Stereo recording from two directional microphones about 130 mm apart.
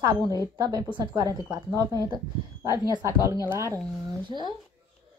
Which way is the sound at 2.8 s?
25° right (ahead or behind).